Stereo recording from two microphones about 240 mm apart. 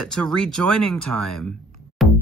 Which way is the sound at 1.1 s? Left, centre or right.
Right.